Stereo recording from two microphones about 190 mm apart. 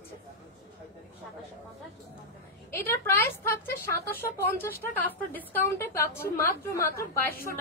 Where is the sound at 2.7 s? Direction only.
10° left (ahead or behind).